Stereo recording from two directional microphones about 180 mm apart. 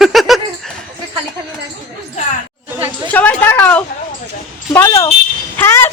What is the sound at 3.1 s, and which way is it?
A woman's voice, 10° left (ahead or behind).